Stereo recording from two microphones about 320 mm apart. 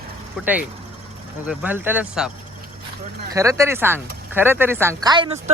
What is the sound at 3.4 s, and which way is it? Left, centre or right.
Speech, centre.